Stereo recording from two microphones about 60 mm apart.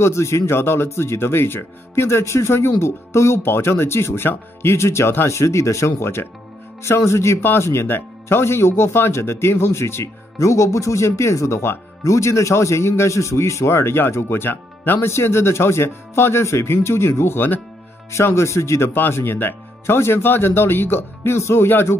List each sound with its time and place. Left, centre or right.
0.0 s speech: left
12.0 s speech: left
18.9 s speech: left